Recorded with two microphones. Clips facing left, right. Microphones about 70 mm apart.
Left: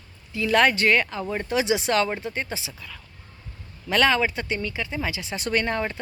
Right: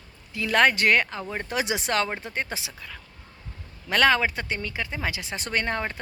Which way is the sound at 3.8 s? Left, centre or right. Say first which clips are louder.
Even; right.